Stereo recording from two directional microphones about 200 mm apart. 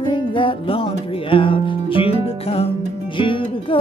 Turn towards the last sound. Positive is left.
turn(degrees=25)  # may be behind; listen again after turning